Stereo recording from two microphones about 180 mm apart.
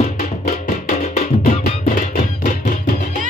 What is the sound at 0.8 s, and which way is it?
Music, 45° left (ahead or behind).